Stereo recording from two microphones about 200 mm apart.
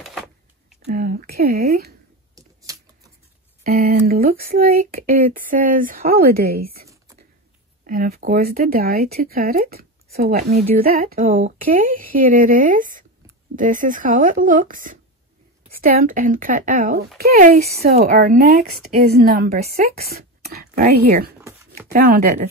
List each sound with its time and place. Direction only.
0.9 s speech: 50° right (ahead or behind)
2.3 s a sound: 15° right (ahead or behind)
3.6 s speech: 50° right (ahead or behind)